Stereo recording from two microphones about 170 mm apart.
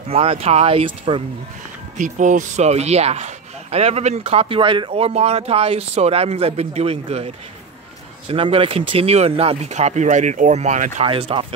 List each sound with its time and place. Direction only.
0.1 s speech: 35° right (ahead or behind)
2.0 s speech: 45° right (ahead or behind)
11.1 s speech: 30° right (ahead or behind)